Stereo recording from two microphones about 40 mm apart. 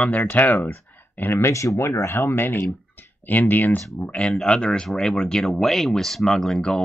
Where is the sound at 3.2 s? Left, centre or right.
Left.